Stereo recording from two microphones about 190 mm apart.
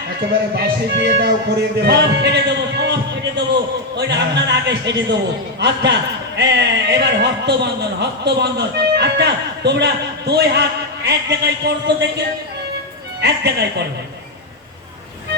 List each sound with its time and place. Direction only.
0.5 s a man's voice: 60° right (ahead or behind)
13.2 s a man's voice: 60° right (ahead or behind)